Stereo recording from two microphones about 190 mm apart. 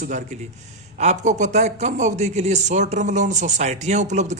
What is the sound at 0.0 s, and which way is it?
A man's voice, 40° right (ahead or behind).